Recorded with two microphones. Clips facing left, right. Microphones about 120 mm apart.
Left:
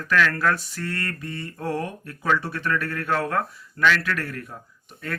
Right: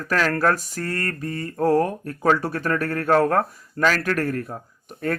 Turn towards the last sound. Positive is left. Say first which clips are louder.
# right 9 dB
turn(degrees=-45)  # may be behind; listen again after turning